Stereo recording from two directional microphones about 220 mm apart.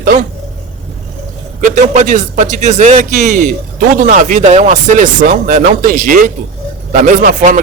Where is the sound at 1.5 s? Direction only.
35° right (ahead or behind).